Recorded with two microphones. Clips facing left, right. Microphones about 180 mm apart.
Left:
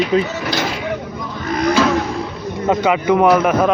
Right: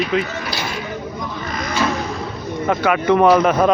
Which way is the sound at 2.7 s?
20° left (ahead or behind).